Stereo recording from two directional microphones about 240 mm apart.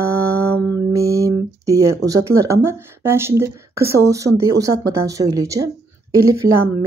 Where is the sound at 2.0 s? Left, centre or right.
Centre.